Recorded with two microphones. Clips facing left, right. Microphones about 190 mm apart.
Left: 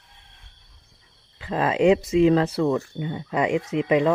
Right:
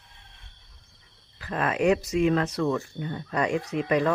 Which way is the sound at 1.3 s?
25° left (ahead or behind).